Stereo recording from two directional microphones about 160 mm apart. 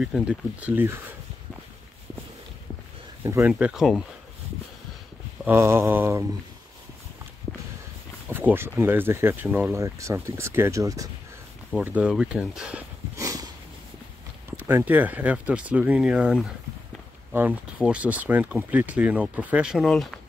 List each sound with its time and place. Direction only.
0.0 s speech: 5° right (ahead or behind)
3.3 s speech: 20° right (ahead or behind)
3.5 s speech: 5° right (ahead or behind)
5.4 s speech: 15° right (ahead or behind)
8.3 s speech: 15° right (ahead or behind)
11.7 s speech: 10° right (ahead or behind)
13.1 s a sound: 20° right (ahead or behind)
14.6 s speech: 15° right (ahead or behind); by 20.2 s centre (ahead or behind)